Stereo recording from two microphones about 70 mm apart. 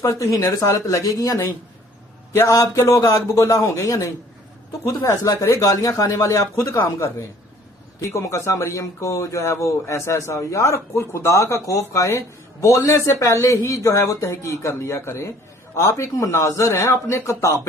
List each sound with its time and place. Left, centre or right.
0.0 s a man's voice: left
2.3 s a man's voice: left
5.2 s a man's voice: left